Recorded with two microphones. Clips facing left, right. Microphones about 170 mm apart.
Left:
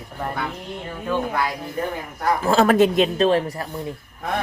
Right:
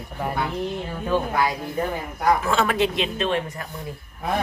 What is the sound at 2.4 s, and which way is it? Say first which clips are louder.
Speech: left 6 dB; 35° left (ahead or behind).